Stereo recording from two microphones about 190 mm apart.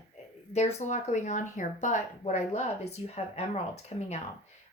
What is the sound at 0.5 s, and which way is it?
Speech, 35° left (ahead or behind).